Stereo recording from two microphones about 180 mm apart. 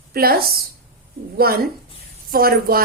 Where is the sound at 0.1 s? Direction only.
55° right (ahead or behind).